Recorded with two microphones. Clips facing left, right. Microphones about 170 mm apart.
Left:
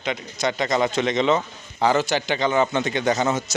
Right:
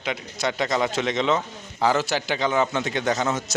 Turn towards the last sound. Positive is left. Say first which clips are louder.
# left 3 dB
turn(degrees=0)  # may be behind; listen again after turning